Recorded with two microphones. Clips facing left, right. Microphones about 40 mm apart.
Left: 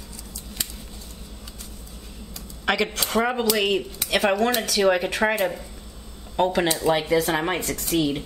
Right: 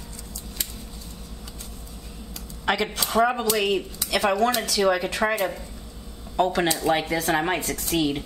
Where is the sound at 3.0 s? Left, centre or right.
Centre.